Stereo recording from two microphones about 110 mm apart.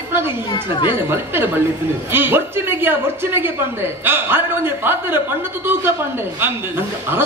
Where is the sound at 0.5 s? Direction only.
40° left (ahead or behind).